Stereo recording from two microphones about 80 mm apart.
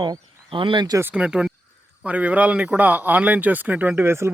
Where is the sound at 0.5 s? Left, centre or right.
Right.